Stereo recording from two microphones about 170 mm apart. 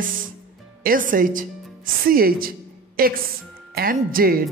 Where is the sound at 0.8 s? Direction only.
55° right (ahead or behind).